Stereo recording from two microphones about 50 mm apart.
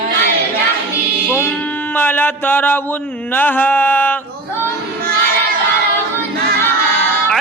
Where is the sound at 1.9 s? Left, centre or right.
Left.